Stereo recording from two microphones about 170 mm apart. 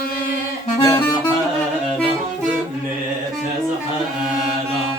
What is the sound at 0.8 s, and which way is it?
Music, 25° left (ahead or behind).